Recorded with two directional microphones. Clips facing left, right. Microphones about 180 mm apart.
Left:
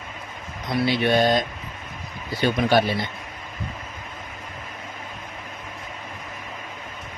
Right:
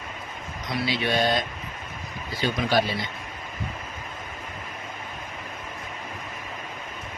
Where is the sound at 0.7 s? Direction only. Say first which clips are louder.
Left 6 dB; 55° left (ahead or behind).